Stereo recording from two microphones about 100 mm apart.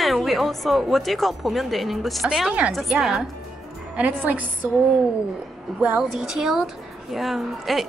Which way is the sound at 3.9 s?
15° right (ahead or behind).